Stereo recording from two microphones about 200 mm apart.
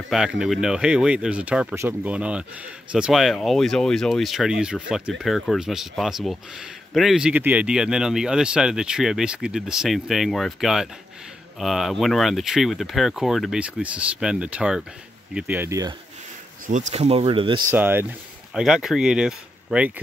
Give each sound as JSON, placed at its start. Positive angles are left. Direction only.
{"t": 0.4, "sound": "speech", "side_deg": -5}
{"t": 16.6, "sound": "speech", "side_deg": -35}
{"t": 17.6, "sound": "speech", "side_deg": -10}